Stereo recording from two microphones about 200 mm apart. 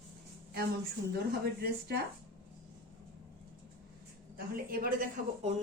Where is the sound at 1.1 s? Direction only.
50° right (ahead or behind).